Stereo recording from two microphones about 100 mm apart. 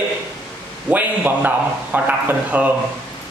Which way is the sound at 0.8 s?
15° right (ahead or behind).